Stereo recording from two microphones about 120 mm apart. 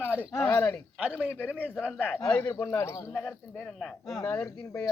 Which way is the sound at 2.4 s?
25° left (ahead or behind).